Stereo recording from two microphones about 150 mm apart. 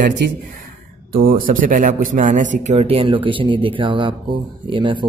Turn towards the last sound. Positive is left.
turn(degrees=-35)  # may be behind; listen again after turning